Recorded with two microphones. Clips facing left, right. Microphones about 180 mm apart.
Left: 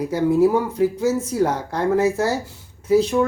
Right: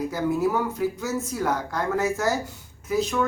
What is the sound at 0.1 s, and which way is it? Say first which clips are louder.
Speech: left 10 dB; 30° left (ahead or behind).